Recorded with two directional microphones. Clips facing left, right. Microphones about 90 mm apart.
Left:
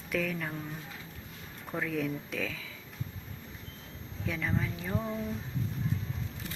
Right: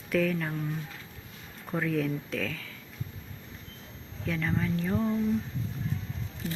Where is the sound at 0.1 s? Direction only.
Centre (ahead or behind).